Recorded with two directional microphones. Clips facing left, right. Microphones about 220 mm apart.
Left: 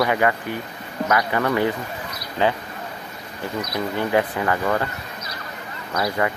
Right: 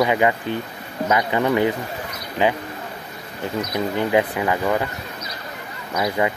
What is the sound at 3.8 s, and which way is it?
Speech, 15° right (ahead or behind).